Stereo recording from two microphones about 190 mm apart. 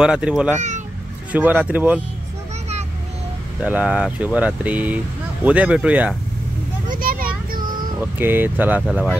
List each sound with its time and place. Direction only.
0.0 s speech: 5° right (ahead or behind)
0.6 s a sound: 40° right (ahead or behind)
1.3 s speech: 10° right (ahead or behind)
3.7 s speech: 5° right (ahead or behind)
6.9 s a sound: 50° right (ahead or behind)
8.0 s speech: 10° right (ahead or behind)